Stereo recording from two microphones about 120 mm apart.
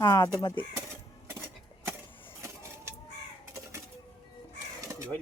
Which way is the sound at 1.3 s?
20° right (ahead or behind).